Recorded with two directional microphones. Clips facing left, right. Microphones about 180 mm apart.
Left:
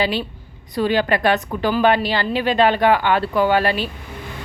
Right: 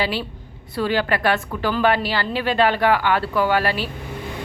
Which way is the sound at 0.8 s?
20° left (ahead or behind).